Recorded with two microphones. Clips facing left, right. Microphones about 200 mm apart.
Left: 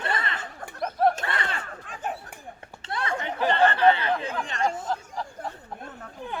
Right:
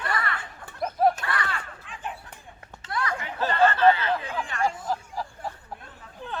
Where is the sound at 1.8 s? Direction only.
45° left (ahead or behind).